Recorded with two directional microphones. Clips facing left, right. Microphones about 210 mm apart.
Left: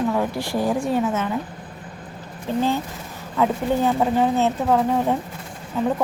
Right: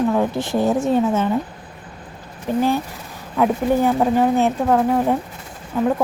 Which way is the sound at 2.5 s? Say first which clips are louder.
Right 3 dB; 15° right (ahead or behind).